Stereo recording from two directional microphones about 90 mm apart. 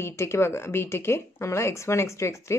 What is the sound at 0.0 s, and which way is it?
Speech, 30° left (ahead or behind).